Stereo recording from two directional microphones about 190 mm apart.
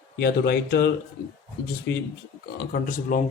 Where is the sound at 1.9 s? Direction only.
65° left (ahead or behind).